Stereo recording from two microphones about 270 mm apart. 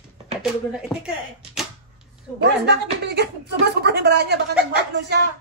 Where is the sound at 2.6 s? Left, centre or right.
Right.